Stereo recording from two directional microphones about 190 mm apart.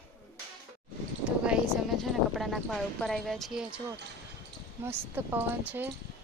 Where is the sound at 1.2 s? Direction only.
5° right (ahead or behind).